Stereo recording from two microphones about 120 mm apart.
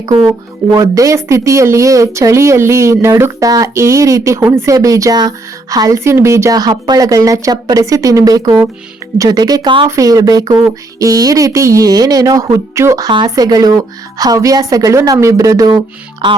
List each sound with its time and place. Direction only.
0.3 s speech: 25° right (ahead or behind)
16.2 s speech: 40° right (ahead or behind)